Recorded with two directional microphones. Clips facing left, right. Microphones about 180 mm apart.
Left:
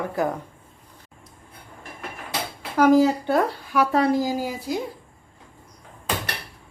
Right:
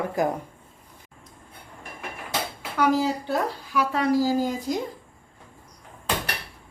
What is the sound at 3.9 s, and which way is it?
Speech, 35° left (ahead or behind).